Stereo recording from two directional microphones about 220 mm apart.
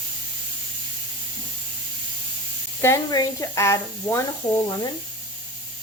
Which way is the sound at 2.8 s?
15° left (ahead or behind).